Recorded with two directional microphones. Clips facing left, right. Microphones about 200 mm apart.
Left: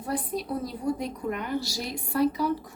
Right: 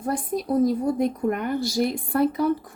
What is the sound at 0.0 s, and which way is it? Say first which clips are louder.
A woman's voice: right 4 dB; 45° right (ahead or behind).